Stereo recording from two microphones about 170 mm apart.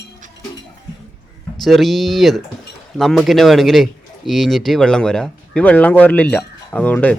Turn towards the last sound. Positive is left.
turn(degrees=10)  # may be behind; listen again after turning